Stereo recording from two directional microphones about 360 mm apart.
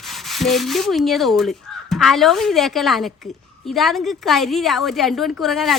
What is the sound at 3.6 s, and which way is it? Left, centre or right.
Speech, centre.